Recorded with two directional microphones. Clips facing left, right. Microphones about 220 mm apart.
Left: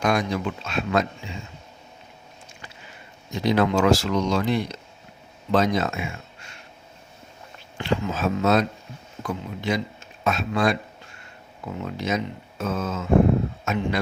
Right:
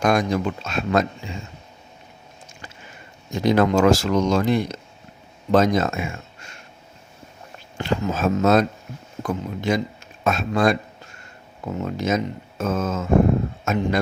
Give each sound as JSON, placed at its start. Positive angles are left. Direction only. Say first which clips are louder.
{"t": 0.0, "sound": "speech", "louder": "right 3 dB", "side_deg": -45}
{"t": 3.3, "sound": "speech", "louder": "right 3 dB", "side_deg": -45}
{"t": 7.8, "sound": "speech", "louder": "right 2 dB", "side_deg": -45}
{"t": 11.8, "sound": "speech", "louder": "right 4 dB", "side_deg": -45}